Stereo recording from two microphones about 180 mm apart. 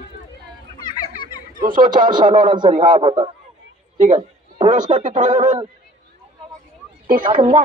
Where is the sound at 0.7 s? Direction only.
25° left (ahead or behind).